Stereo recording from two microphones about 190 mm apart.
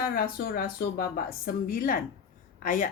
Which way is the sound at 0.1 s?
50° left (ahead or behind).